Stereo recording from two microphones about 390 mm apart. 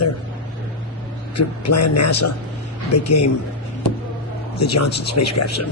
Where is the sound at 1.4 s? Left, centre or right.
Left.